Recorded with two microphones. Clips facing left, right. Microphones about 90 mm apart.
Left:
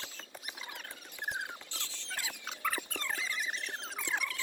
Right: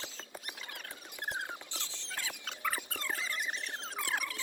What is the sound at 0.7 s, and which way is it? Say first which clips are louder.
Squeal: even; centre (ahead or behind).